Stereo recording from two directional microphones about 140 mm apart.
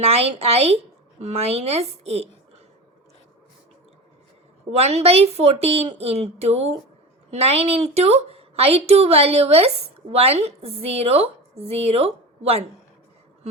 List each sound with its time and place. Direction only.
0.0 s a woman's voice: 45° right (ahead or behind)
4.7 s a woman's voice: 50° right (ahead or behind)